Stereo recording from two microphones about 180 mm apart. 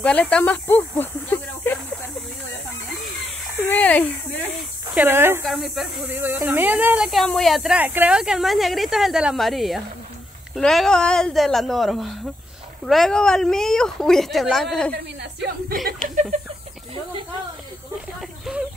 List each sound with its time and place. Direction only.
0.0 s speech: 5° left (ahead or behind)
3.6 s speech: 10° left (ahead or behind)
4.9 s speech: 10° right (ahead or behind)
5.4 s speech: centre (ahead or behind)
7.1 s speech: centre (ahead or behind)
15.1 s speech: 65° right (ahead or behind)
18.2 s a sound: centre (ahead or behind)